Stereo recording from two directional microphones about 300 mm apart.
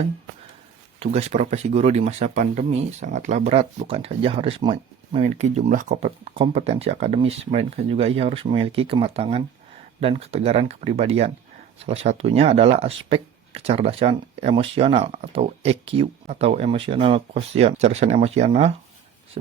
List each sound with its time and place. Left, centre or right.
0.9 s speech: right